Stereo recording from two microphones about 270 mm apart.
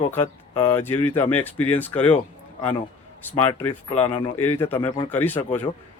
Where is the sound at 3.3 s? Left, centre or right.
Centre.